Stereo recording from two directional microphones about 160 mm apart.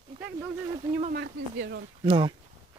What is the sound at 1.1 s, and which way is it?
Speech, 80° right.